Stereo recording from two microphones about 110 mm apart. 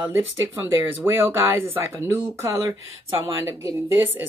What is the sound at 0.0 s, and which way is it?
Speech, 15° right (ahead or behind).